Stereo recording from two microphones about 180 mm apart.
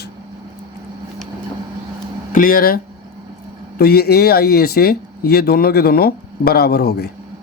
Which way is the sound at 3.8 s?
60° left (ahead or behind).